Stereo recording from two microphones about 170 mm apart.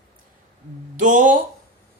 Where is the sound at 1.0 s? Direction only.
50° right (ahead or behind).